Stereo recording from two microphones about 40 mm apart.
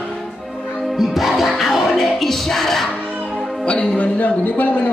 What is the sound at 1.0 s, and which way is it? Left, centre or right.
Music, centre.